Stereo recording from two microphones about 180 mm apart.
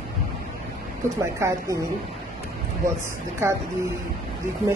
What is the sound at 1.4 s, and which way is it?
Speech, 15° right (ahead or behind).